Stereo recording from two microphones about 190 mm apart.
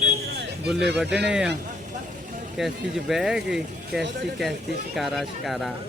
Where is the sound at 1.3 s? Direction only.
5° right (ahead or behind).